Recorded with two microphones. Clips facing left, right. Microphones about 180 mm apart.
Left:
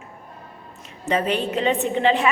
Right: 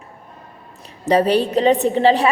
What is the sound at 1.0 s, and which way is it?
A woman's voice, 35° right (ahead or behind).